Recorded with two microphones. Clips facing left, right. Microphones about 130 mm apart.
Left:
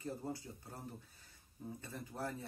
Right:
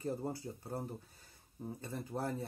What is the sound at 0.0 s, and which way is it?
Speech, 40° right (ahead or behind).